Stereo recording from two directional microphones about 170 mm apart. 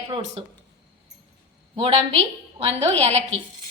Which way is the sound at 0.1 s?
35° right (ahead or behind).